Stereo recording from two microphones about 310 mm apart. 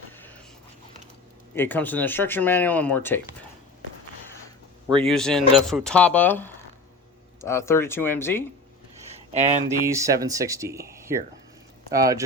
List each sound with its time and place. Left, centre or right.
1.5 s speech: centre
5.0 s speech: centre
9.3 s speech: right
9.6 s speech: centre